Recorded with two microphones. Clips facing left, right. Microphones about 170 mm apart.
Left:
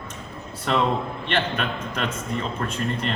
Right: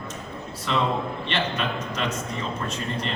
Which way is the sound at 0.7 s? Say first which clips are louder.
Left 2 dB; 50° left (ahead or behind).